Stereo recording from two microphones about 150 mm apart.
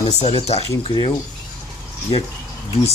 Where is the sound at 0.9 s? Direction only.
30° left (ahead or behind).